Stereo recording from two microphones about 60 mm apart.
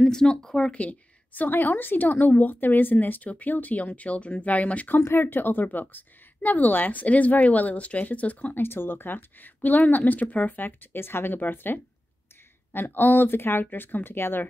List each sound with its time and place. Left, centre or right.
0.0 s speech: centre
0.7 s a woman's voice: left
4.9 s a woman's voice: left
8.6 s speech: left